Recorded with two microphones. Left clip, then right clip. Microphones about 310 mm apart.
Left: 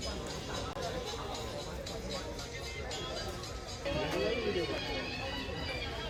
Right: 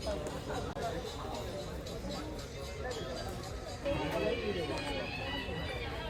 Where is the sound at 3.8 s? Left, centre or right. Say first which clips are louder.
Even; centre.